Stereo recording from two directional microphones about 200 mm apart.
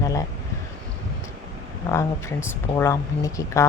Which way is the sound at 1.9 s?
10° left (ahead or behind).